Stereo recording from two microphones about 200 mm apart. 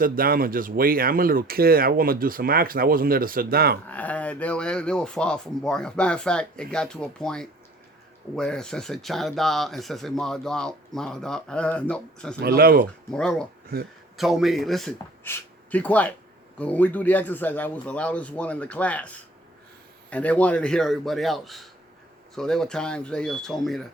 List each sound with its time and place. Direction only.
0.0 s speech: 45° right (ahead or behind)
3.8 s speech: 10° left (ahead or behind)
12.4 s speech: 50° right (ahead or behind)
13.1 s a man's voice: 5° left (ahead or behind)